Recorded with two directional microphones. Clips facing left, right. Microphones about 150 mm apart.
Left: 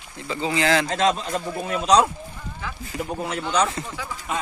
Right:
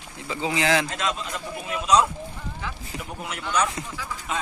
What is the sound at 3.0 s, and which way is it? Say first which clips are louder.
Speech: left 9 dB; 25° left (ahead or behind).